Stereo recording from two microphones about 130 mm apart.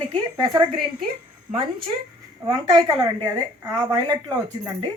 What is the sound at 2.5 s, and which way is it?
A woman's voice, 35° right (ahead or behind).